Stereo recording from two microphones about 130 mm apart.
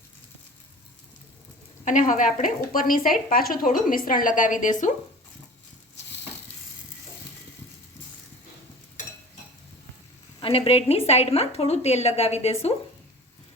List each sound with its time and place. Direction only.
1.8 s a woman's voice: 75° left (ahead or behind)
10.4 s a woman's voice: 45° left (ahead or behind)